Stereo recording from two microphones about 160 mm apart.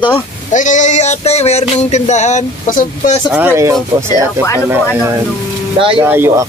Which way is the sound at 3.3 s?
10° right (ahead or behind).